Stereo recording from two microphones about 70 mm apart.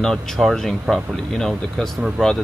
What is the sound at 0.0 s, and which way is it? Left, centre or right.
Speech, centre.